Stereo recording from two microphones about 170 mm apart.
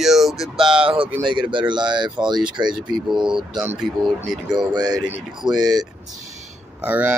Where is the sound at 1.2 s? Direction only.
30° right (ahead or behind).